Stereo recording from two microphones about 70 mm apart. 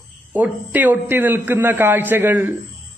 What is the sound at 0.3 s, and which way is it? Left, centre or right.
A man's voice, right.